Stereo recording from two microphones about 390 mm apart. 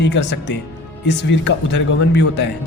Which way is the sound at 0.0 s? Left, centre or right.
Left.